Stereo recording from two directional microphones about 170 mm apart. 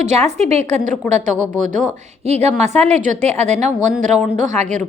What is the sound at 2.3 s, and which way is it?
A woman's voice, 40° right (ahead or behind).